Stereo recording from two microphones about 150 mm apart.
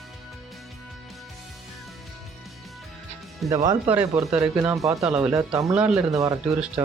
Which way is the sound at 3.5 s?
25° right (ahead or behind).